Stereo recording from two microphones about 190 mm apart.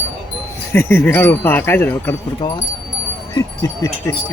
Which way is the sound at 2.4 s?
20° left (ahead or behind).